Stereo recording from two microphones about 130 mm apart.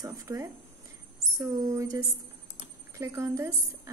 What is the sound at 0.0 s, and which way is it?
A woman's voice, 25° right (ahead or behind).